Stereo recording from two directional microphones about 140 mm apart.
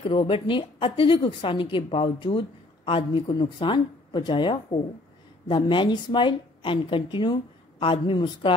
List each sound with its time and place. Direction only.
0.0 s a woman's voice: 35° left (ahead or behind)